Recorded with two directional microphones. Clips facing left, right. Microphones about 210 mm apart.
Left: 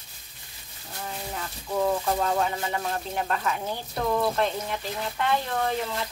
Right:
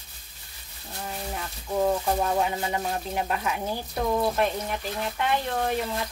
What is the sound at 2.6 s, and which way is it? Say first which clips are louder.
Speech: right 1 dB; 20° right (ahead or behind).